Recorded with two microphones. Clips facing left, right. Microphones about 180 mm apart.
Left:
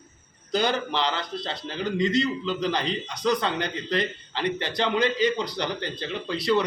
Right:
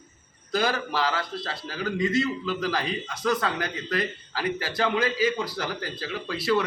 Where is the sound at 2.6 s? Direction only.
5° right (ahead or behind).